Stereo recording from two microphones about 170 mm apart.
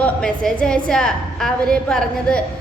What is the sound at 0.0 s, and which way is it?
A woman's voice, 5° left (ahead or behind).